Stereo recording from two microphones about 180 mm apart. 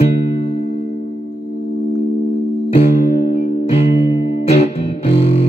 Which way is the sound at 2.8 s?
60° left (ahead or behind).